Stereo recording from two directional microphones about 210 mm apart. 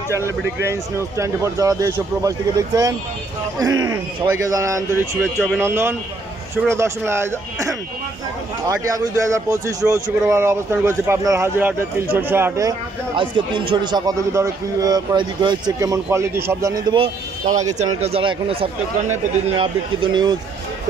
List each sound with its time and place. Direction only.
0.1 s a man's voice: 15° right (ahead or behind)